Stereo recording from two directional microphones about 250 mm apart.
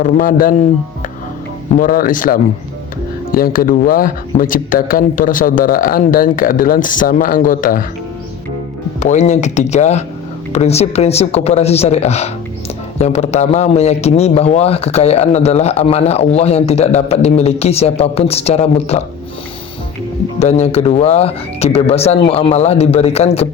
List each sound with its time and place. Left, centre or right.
0.0 s speech: left
1.7 s speech: left
9.0 s a man's voice: left
20.4 s a man's voice: left